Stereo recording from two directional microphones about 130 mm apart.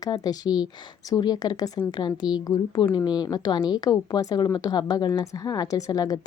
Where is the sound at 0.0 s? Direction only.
30° left (ahead or behind).